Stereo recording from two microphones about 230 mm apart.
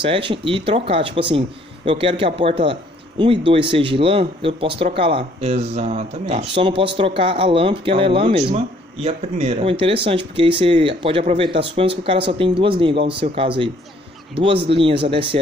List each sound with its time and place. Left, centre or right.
0.0 s speech: right